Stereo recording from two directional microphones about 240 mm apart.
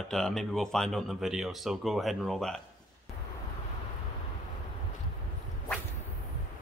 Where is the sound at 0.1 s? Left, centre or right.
Centre.